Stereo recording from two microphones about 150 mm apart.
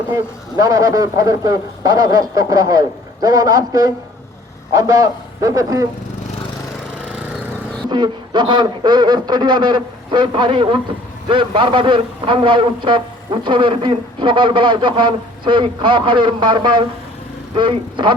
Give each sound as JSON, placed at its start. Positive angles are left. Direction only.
{"t": 0.1, "sound": "a man's voice", "side_deg": -20}
{"t": 7.9, "sound": "a man's voice", "side_deg": -30}